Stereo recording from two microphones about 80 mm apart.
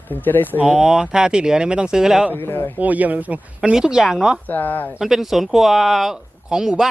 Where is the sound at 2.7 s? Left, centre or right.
Centre.